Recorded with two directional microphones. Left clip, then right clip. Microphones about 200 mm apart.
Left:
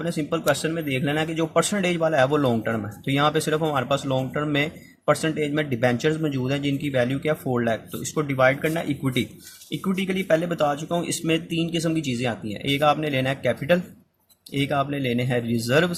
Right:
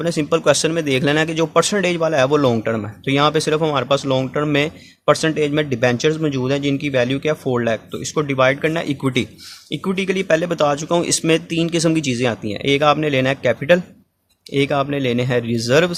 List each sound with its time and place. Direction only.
0.0 s speech: 35° right (ahead or behind)